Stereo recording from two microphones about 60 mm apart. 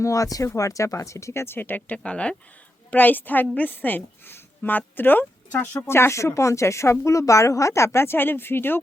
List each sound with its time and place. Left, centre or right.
0.0 s speech: left
2.0 s a woman's voice: centre
2.9 s speech: left
3.4 s a woman's voice: left
3.7 s a woman's voice: left
5.8 s speech: left
7.9 s speech: left